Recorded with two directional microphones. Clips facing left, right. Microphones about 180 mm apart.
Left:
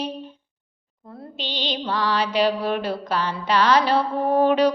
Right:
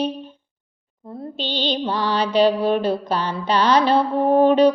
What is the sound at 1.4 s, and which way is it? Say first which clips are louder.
Mantra: right 5 dB; 30° right (ahead or behind).